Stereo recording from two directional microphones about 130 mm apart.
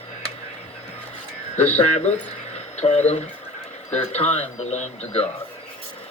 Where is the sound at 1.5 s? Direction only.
55° left (ahead or behind).